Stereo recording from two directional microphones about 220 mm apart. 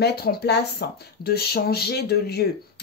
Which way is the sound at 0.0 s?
45° left (ahead or behind).